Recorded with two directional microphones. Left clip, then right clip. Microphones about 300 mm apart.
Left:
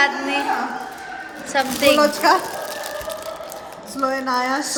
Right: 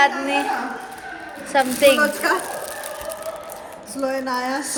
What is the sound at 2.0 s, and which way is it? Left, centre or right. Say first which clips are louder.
Speech: left 4 dB; centre.